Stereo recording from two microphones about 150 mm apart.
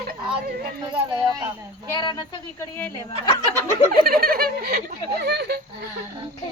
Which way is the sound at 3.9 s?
85° right.